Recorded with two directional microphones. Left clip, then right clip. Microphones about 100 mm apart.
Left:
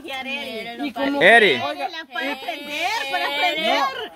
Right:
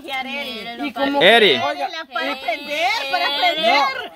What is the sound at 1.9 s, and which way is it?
Speech, 30° right (ahead or behind).